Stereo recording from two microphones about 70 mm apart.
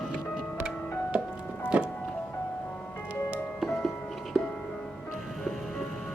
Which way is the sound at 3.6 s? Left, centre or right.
Centre.